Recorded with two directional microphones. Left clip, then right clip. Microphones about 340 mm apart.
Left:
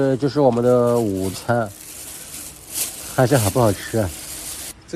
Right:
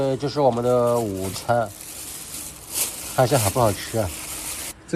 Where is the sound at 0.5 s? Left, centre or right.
Left.